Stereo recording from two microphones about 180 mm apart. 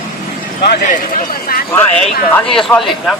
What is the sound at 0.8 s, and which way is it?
Speech, 45° left (ahead or behind).